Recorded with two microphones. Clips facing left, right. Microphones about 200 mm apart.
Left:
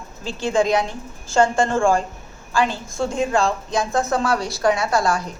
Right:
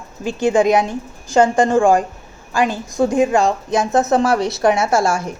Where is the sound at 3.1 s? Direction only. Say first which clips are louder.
Right 4 dB; 15° right (ahead or behind).